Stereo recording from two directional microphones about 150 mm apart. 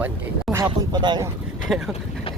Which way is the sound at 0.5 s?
25° right (ahead or behind).